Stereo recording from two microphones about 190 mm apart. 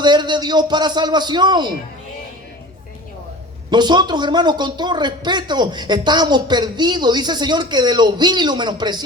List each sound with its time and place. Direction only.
0.0 s speech: 25° right (ahead or behind)
3.7 s speech: 25° right (ahead or behind)